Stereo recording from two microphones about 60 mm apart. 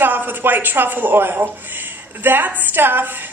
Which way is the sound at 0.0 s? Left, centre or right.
Right.